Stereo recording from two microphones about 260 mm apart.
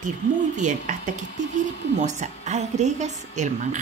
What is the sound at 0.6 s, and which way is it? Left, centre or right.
A woman's voice, right.